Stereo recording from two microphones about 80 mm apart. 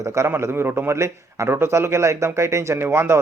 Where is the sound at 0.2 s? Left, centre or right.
Right.